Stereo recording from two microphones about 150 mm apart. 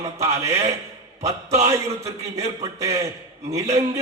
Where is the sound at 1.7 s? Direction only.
20° right (ahead or behind).